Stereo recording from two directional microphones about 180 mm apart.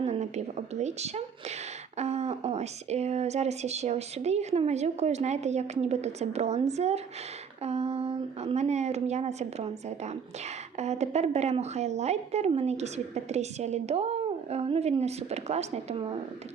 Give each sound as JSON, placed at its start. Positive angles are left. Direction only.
{"t": 0.0, "sound": "a woman's voice", "side_deg": -35}